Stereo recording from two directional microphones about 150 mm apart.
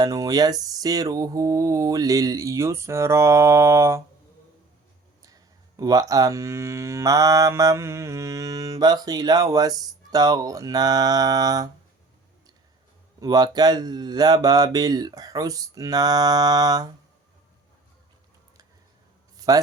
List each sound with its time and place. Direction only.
0.0 s cattle: 25° right (ahead or behind)
5.2 s cattle: 25° right (ahead or behind)
13.1 s cattle: 25° right (ahead or behind)
19.4 s a sound: 25° right (ahead or behind)